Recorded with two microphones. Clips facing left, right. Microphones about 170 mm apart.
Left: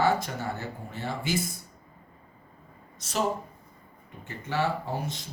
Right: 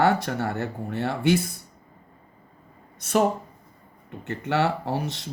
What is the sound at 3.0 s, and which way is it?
Speech, 55° right (ahead or behind).